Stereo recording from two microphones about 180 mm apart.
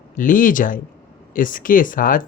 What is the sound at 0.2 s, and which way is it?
Speech, 50° left (ahead or behind).